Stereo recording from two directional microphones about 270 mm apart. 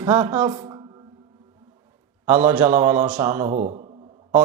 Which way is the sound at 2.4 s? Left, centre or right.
Centre.